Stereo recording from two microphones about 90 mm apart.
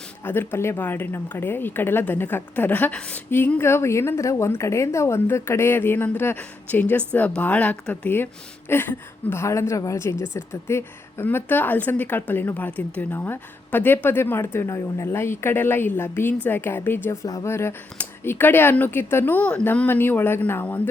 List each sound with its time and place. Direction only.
0.3 s a woman's voice: 25° left (ahead or behind)
17.2 s speech: 45° left (ahead or behind)
17.5 s a woman's voice: 30° left (ahead or behind)